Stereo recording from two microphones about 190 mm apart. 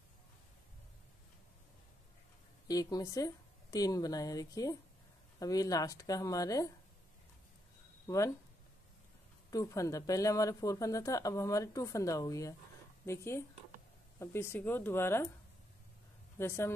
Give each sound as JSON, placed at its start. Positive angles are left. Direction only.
{"t": 2.7, "sound": "speech", "side_deg": 20}
{"t": 8.1, "sound": "speech", "side_deg": 15}
{"t": 9.5, "sound": "speech", "side_deg": 15}
{"t": 16.3, "sound": "speech", "side_deg": 15}